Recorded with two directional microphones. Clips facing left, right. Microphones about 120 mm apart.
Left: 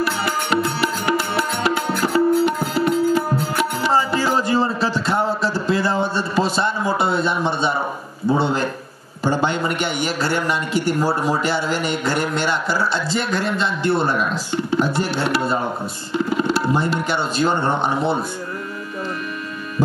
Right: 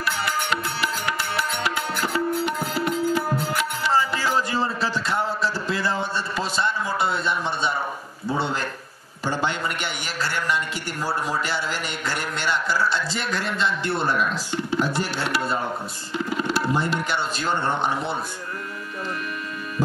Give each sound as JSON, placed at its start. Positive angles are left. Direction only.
{"t": 0.2, "sound": "music", "side_deg": 30}
{"t": 8.4, "sound": "a man's voice", "side_deg": 25}